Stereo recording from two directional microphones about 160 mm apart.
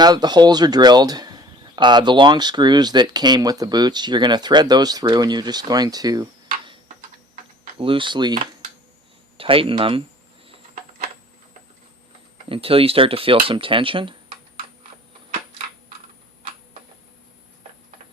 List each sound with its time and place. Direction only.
0.0 s speech: 25° right (ahead or behind)
7.8 s speech: 30° right (ahead or behind)
9.4 s speech: 35° right (ahead or behind)
12.5 s speech: 35° right (ahead or behind)